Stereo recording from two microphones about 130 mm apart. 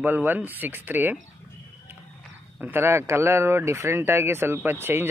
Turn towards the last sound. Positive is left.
turn(degrees=-15)  # may be behind; listen again after turning